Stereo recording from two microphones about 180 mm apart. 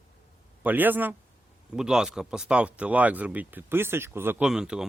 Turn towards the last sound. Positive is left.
turn(degrees=-5)  # may be behind; listen again after turning